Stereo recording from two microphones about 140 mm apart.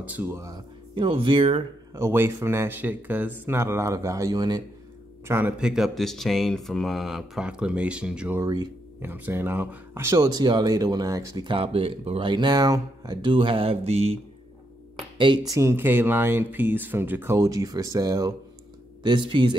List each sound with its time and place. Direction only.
0.0 s speech: 10° right (ahead or behind)
0.5 s speech: 40° right (ahead or behind)
2.0 s speech: 20° right (ahead or behind)
5.3 s speech: 10° right (ahead or behind); by 11.5 s 25° right (ahead or behind)
11.5 s speech: 40° right (ahead or behind)
15.1 s speech: 35° right (ahead or behind)